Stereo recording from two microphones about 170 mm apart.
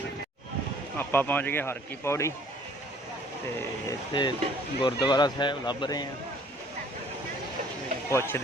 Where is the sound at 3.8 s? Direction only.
25° left (ahead or behind).